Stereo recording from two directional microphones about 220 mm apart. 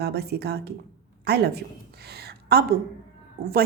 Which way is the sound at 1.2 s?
45° right (ahead or behind).